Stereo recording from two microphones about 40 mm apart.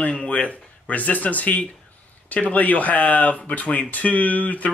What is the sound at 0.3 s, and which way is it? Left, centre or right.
Speech, left.